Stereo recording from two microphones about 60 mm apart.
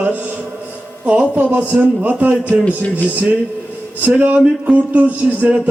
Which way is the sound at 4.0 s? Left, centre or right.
Right.